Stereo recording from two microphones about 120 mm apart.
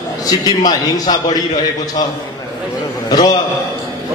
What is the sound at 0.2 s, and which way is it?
A man's voice, 30° left (ahead or behind).